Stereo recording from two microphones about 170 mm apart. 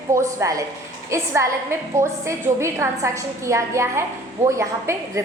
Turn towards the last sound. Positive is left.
turn(degrees=-15)  # may be behind; listen again after turning